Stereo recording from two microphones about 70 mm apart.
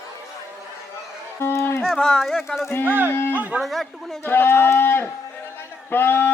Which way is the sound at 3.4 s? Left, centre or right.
Right.